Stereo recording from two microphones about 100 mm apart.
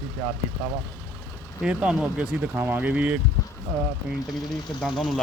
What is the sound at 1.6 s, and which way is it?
Speech, 10° right (ahead or behind).